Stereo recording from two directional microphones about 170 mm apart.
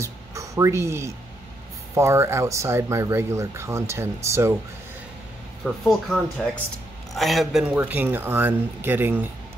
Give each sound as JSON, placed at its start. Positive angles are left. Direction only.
{"t": 0.0, "sound": "a sound", "side_deg": -20}
{"t": 2.0, "sound": "speech", "side_deg": -15}
{"t": 5.9, "sound": "speech", "side_deg": 0}